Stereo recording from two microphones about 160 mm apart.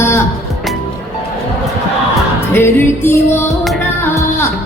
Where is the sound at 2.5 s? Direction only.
15° left (ahead or behind).